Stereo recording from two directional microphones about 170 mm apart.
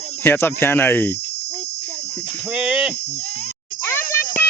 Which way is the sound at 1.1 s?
75° left (ahead or behind).